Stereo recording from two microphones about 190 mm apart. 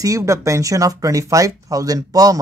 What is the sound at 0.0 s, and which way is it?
Speech, 15° right (ahead or behind).